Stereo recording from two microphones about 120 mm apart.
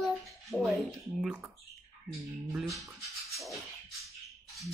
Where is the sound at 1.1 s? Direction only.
10° right (ahead or behind).